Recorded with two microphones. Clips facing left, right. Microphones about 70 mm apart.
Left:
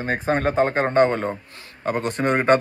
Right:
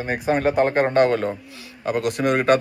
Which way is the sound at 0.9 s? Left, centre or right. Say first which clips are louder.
Even; left.